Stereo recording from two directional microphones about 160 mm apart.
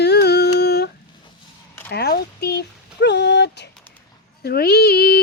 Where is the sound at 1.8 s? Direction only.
85° left.